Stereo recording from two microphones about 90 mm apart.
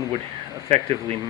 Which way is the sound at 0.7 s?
90° right.